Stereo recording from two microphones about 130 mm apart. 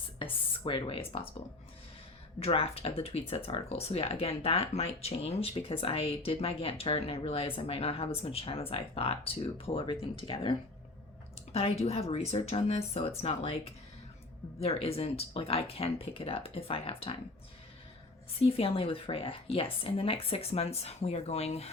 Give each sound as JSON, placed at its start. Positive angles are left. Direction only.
{"t": 0.2, "sound": "speech", "side_deg": 40}
{"t": 2.4, "sound": "speech", "side_deg": 50}
{"t": 11.5, "sound": "speech", "side_deg": 50}
{"t": 14.6, "sound": "speech", "side_deg": 50}
{"t": 18.4, "sound": "speech", "side_deg": 50}